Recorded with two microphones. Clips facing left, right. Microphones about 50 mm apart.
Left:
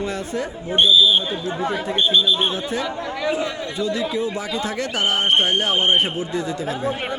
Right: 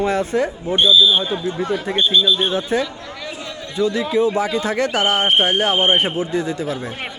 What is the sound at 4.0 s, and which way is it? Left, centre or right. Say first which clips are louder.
Speech: right 6 dB; right.